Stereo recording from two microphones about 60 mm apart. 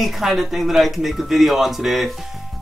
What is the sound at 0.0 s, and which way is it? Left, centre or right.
Speech, centre.